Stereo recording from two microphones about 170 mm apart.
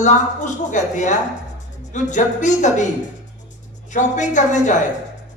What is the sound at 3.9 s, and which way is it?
Speech, 45° left (ahead or behind).